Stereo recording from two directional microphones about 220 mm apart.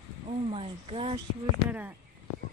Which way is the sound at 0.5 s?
25° right (ahead or behind).